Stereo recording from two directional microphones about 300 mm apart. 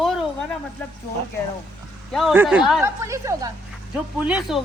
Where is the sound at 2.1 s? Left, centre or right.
Centre.